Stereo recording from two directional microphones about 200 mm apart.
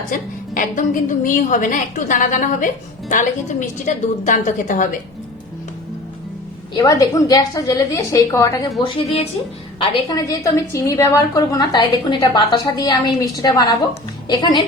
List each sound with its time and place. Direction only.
0.1 s a woman's voice: 40° left (ahead or behind)
3.8 s a woman's voice: 40° left (ahead or behind)
6.7 s a woman's voice: 20° left (ahead or behind)